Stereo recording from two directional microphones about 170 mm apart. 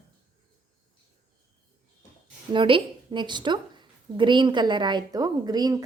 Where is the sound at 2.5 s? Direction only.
30° right (ahead or behind).